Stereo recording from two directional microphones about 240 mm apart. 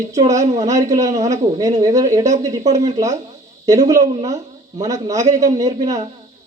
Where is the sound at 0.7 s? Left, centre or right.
Centre.